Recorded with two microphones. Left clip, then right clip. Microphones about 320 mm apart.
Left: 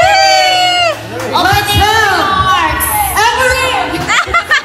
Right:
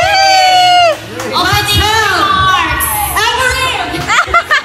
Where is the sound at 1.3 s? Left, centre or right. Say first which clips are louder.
Left 1 dB; left.